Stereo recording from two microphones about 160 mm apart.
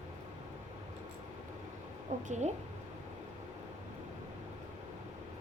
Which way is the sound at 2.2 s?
45° right (ahead or behind).